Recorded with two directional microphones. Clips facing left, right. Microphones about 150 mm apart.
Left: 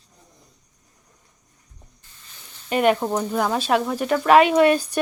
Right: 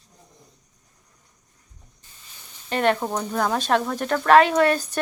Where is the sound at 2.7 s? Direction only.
10° left (ahead or behind).